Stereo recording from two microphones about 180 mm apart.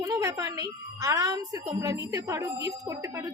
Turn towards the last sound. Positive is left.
turn(degrees=-20)  # may be behind; listen again after turning